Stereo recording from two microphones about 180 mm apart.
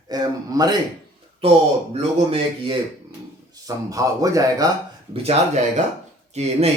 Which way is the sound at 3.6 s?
20° right (ahead or behind).